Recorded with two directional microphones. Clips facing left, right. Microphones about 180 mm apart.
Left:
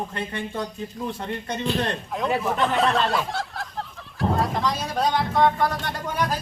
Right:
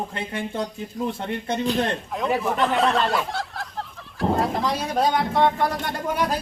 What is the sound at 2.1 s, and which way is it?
Speech, centre (ahead or behind).